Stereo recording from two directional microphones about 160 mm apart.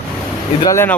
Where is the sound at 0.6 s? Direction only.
15° left (ahead or behind).